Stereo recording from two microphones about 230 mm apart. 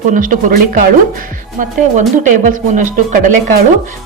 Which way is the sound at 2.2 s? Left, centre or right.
Right.